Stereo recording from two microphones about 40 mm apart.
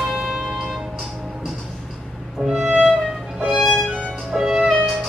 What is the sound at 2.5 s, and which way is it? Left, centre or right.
Music, centre.